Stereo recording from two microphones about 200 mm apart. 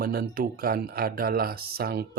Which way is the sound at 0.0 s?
50° right (ahead or behind).